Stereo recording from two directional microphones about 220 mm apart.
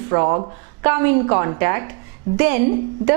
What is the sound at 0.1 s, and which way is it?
Speech, 20° right (ahead or behind).